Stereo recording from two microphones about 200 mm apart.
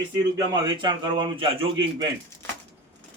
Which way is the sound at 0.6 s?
25° right (ahead or behind).